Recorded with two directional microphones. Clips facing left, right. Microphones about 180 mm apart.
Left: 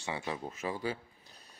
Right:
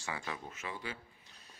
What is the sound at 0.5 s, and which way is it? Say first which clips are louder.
Speech: left 8 dB; 35° left (ahead or behind).